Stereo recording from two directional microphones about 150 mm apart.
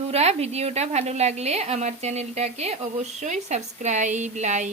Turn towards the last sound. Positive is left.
turn(degrees=-50)  # may be behind; listen again after turning